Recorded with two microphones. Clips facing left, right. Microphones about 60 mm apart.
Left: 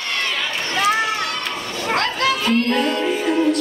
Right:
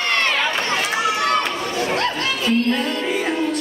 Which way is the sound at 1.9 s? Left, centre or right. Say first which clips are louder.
Left 2 dB; left.